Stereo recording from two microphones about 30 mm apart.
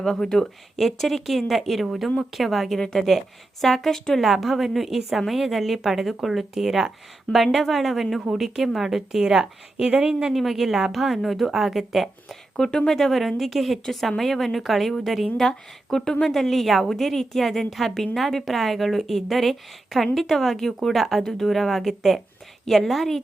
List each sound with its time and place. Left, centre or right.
0.0 s a woman's voice: centre
4.2 s a woman's voice: centre
5.2 s a woman's voice: centre
9.2 s speech: centre
10.3 s a woman's voice: centre
12.5 s speech: left
12.9 s a woman's voice: centre
13.8 s a woman's voice: centre
15.4 s a woman's voice: centre
21.5 s a woman's voice: centre